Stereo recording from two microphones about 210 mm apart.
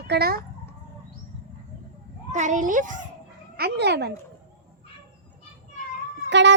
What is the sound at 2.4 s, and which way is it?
Speech, 35° right (ahead or behind).